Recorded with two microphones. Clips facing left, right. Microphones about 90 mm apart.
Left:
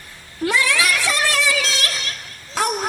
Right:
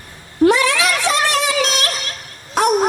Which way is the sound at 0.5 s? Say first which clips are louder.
Right 3 dB; 20° right (ahead or behind).